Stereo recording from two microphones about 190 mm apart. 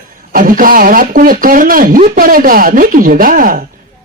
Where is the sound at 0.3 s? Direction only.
45° right (ahead or behind).